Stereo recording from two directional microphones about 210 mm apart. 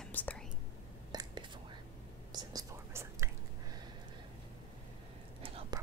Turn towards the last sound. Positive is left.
turn(degrees=-25)  # may be behind; listen again after turning